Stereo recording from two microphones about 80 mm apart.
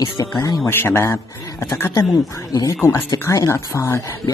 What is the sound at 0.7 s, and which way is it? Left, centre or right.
Speech, left.